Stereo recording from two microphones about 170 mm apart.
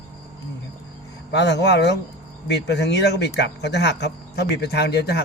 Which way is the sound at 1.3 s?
90° left.